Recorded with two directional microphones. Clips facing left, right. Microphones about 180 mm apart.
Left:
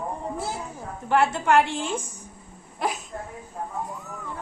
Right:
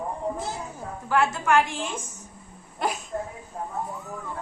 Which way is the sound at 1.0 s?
30° left (ahead or behind).